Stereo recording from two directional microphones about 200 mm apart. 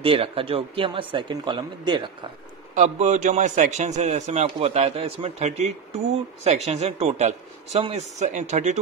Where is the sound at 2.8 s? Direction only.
35° right (ahead or behind).